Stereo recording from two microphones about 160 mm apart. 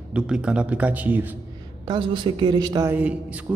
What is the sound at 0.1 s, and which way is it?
A man's voice, 5° right (ahead or behind).